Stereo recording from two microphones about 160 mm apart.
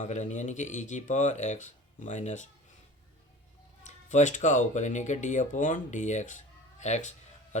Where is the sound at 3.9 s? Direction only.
50° left (ahead or behind).